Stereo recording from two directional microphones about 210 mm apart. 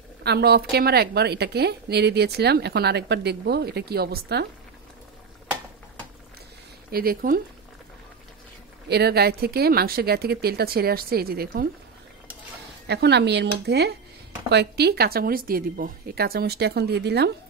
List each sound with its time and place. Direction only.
0.2 s a woman's voice: 50° right (ahead or behind)
6.9 s a woman's voice: 45° right (ahead or behind)
8.8 s a woman's voice: 50° right (ahead or behind)
12.8 s a woman's voice: 55° right (ahead or behind)